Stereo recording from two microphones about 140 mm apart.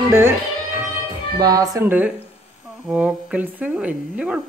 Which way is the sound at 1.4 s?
25° right (ahead or behind).